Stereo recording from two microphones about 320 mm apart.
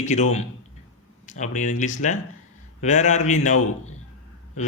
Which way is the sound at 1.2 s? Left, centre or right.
Left.